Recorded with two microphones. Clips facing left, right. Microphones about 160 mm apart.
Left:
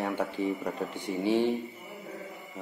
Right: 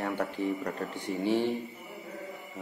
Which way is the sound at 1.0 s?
20° left (ahead or behind).